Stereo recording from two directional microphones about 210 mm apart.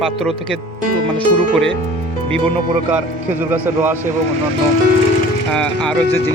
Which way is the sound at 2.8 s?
10° right (ahead or behind).